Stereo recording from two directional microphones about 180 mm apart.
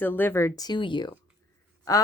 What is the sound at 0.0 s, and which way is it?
A woman's voice, 10° left (ahead or behind).